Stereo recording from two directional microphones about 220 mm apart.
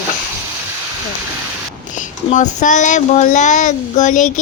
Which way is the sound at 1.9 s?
35° left (ahead or behind).